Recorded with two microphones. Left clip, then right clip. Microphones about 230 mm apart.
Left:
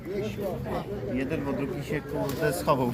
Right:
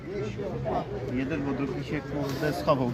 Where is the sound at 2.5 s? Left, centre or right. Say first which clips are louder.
Even; left.